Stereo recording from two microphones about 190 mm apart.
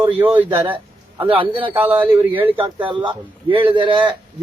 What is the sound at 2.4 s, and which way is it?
Speech, 10° right (ahead or behind).